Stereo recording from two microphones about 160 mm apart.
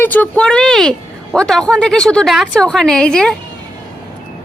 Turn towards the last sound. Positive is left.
turn(degrees=5)  # may be behind; listen again after turning